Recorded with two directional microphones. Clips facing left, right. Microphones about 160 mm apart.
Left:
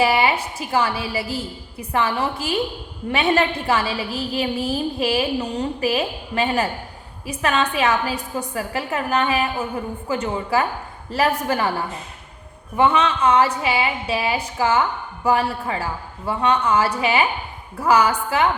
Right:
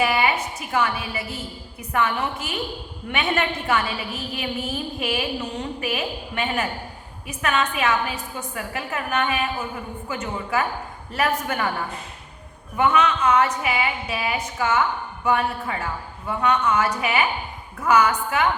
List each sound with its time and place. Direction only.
0.0 s a woman's voice: 30° left (ahead or behind)
12.7 s a woman's voice: 30° left (ahead or behind)